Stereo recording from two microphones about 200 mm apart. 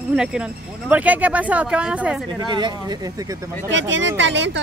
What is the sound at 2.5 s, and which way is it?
Speech, 20° right (ahead or behind).